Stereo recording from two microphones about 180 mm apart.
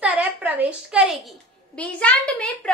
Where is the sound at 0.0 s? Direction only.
10° right (ahead or behind).